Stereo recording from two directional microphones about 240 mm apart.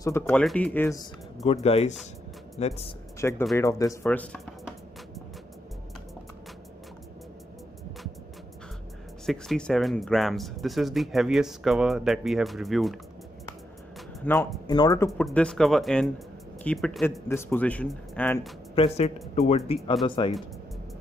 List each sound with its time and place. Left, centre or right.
0.0 s speech: centre
1.4 s speech: left
3.2 s speech: centre
9.2 s speech: centre
14.2 s speech: centre
15.0 s speech: centre
18.8 s speech: left